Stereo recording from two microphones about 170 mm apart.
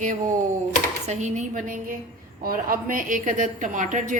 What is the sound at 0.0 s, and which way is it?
A woman's voice, 45° right (ahead or behind).